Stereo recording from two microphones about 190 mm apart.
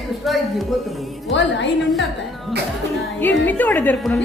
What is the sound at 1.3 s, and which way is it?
Speech, 70° left (ahead or behind).